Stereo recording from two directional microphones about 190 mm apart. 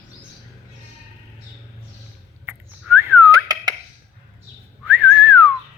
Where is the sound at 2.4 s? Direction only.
10° right (ahead or behind).